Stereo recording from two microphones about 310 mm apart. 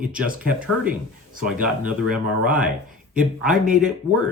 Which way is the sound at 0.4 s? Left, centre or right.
Centre.